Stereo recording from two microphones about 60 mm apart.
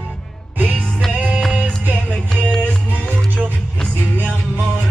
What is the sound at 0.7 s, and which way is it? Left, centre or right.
Music, centre.